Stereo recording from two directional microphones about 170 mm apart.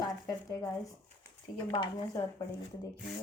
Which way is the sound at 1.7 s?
25° left (ahead or behind).